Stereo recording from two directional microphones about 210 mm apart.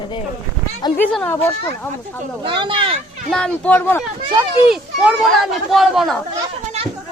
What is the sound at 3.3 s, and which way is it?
Speech, 5° left (ahead or behind).